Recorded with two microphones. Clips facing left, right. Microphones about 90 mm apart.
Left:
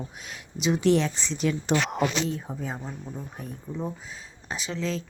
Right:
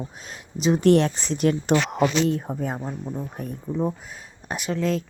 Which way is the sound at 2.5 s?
50° right (ahead or behind).